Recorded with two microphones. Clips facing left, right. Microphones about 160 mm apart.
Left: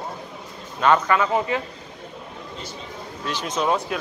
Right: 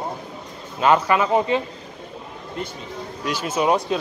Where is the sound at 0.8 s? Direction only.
10° right (ahead or behind).